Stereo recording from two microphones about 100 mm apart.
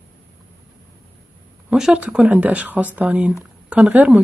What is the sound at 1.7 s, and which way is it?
Speech, 5° right (ahead or behind).